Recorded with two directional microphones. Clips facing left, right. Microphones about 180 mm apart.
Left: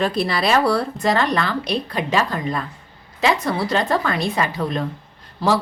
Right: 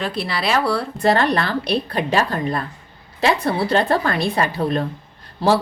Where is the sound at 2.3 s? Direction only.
35° right (ahead or behind).